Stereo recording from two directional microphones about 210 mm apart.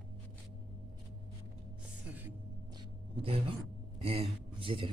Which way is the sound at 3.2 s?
25° right (ahead or behind).